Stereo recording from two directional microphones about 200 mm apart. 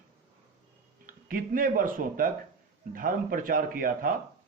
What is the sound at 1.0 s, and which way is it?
Speech, 45° right (ahead or behind).